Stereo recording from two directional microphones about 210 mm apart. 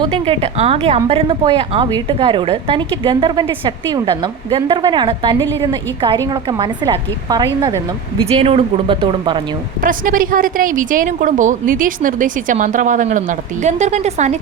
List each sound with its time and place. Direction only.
0.0 s speech: 25° right (ahead or behind)
8.2 s speech: 25° right (ahead or behind)
9.8 s a woman's voice: 40° right (ahead or behind)